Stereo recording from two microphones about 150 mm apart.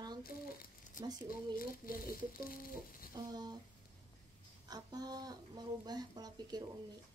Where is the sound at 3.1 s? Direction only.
25° right (ahead or behind).